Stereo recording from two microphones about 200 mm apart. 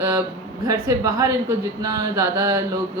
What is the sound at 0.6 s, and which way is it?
A woman's voice, 15° right (ahead or behind).